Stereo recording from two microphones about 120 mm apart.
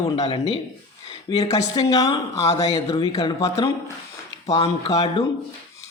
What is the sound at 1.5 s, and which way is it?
Speech, 30° left (ahead or behind).